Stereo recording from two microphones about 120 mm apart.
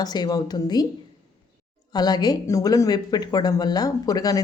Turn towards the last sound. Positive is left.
turn(degrees=30)  # may be behind; listen again after turning